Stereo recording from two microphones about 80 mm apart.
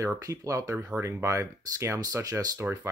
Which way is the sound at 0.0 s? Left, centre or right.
Right.